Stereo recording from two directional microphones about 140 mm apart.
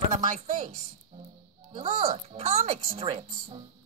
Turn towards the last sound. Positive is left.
turn(degrees=-40)  # may be behind; listen again after turning